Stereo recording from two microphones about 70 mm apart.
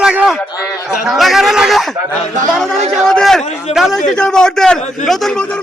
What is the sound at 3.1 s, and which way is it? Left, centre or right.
A man's voice, centre.